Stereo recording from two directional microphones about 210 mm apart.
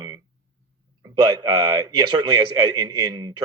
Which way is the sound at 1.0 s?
20° right (ahead or behind).